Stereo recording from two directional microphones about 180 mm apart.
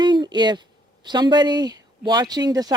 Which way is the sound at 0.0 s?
25° right (ahead or behind).